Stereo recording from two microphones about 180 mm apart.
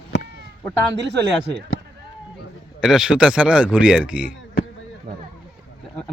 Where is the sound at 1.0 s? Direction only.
70° right (ahead or behind).